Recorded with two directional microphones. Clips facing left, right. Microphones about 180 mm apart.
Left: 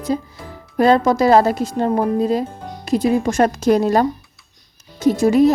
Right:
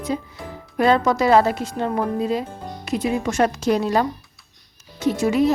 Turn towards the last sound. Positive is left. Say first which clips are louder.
# left 5 dB
turn(degrees=40)  # may be behind; listen again after turning